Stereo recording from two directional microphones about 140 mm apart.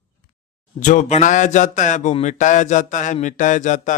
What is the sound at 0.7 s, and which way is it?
A man's voice, 60° left (ahead or behind).